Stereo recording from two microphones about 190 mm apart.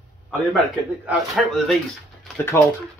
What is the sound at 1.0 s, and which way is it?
Speech, centre (ahead or behind).